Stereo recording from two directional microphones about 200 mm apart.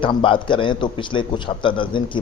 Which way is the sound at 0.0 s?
25° left (ahead or behind).